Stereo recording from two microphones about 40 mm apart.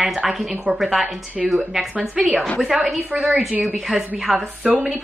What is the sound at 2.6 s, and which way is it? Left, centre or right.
Speech, centre.